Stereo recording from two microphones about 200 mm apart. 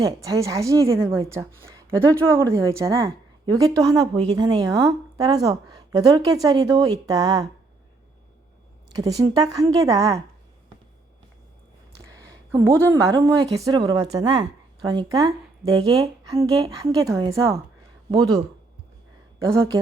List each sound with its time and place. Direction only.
0.0 s a woman's voice: 15° right (ahead or behind)
9.0 s a woman's voice: 20° right (ahead or behind)
12.2 s a woman's voice: 15° right (ahead or behind)